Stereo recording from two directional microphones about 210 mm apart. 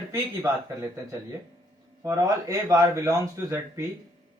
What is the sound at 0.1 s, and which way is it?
Speech, 15° right (ahead or behind).